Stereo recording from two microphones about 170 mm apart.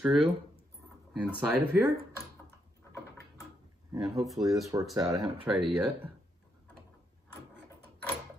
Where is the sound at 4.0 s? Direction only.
Centre (ahead or behind).